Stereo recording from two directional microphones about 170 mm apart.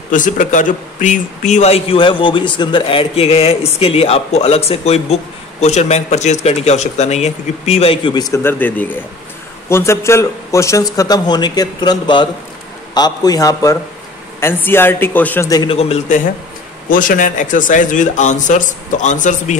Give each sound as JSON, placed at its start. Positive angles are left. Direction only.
{"t": 0.1, "sound": "a man's voice", "side_deg": 50}
{"t": 15.7, "sound": "speech", "side_deg": 35}
{"t": 16.9, "sound": "speech", "side_deg": 50}